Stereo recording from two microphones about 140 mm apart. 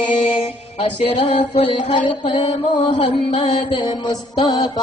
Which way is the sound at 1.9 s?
40° left (ahead or behind).